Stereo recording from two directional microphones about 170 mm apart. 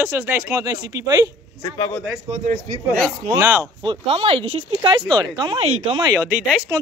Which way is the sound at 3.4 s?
15° right (ahead or behind).